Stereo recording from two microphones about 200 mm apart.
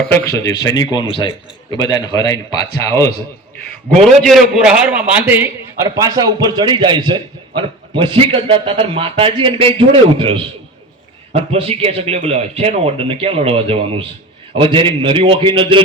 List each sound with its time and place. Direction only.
0.0 s a man's voice: 10° left (ahead or behind)
4.0 s a man's voice: centre (ahead or behind); by 15.8 s 25° right (ahead or behind)